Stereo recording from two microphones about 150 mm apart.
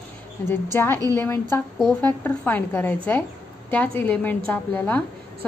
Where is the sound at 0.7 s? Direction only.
15° left (ahead or behind).